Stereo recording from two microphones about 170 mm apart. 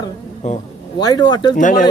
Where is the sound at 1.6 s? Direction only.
50° left (ahead or behind).